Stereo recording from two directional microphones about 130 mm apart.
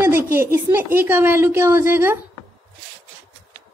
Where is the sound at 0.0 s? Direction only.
20° right (ahead or behind).